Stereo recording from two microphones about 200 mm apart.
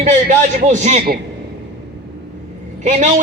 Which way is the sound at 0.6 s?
35° right (ahead or behind).